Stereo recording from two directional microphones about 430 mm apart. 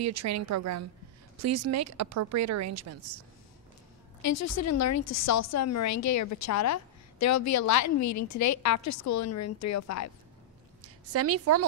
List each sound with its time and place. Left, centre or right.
0.0 s speech: right
4.2 s a woman's voice: left
10.8 s a woman's voice: right